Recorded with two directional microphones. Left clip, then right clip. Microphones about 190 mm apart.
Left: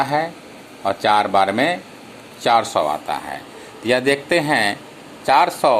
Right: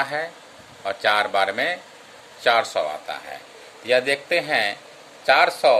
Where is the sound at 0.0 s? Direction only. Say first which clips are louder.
Left 6 dB; 5° left (ahead or behind).